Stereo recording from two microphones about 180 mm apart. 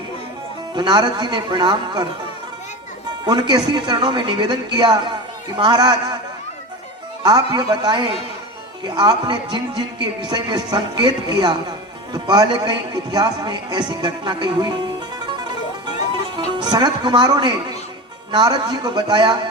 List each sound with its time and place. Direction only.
0.8 s speech: 25° right (ahead or behind)
3.2 s speech: 20° right (ahead or behind)
7.2 s speech: 20° right (ahead or behind)
16.6 s speech: 25° right (ahead or behind)